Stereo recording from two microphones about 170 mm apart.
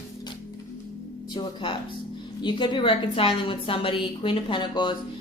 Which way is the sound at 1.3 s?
25° left (ahead or behind).